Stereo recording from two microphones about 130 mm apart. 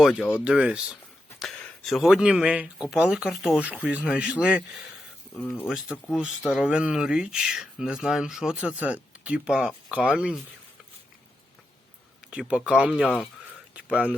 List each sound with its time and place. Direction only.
0.0 s speech: 5° right (ahead or behind)
5.4 s speech: 10° left (ahead or behind)
5.6 s speech: 5° right (ahead or behind)
12.3 s speech: 5° right (ahead or behind)